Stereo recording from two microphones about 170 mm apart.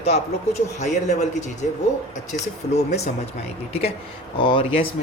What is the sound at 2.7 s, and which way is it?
Speech, 40° left (ahead or behind).